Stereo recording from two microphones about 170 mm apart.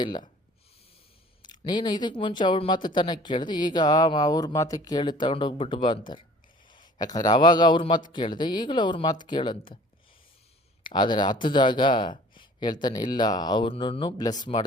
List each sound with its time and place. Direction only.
1.4 s speech: 25° left (ahead or behind)
10.8 s speech: 25° left (ahead or behind)